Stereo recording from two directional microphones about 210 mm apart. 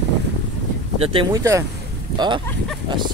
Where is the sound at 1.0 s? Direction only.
25° right (ahead or behind).